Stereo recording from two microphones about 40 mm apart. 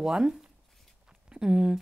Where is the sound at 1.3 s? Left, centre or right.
Right.